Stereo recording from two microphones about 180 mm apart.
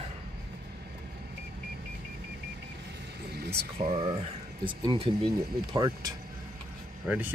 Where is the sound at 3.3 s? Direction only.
65° right (ahead or behind).